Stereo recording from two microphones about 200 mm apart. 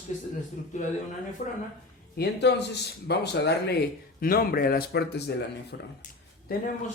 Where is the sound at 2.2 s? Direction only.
55° left (ahead or behind).